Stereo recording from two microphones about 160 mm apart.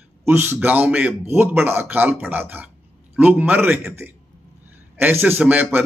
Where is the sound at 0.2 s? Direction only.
15° right (ahead or behind).